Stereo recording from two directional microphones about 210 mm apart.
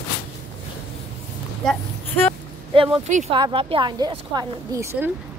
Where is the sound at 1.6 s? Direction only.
5° left (ahead or behind).